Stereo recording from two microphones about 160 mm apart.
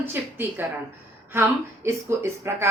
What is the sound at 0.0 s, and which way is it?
A woman's voice, 15° right (ahead or behind).